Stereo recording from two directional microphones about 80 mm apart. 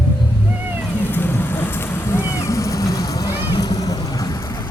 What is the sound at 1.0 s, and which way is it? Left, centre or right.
Vehicle, left.